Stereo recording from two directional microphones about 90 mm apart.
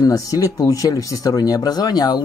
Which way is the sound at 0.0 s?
40° left (ahead or behind).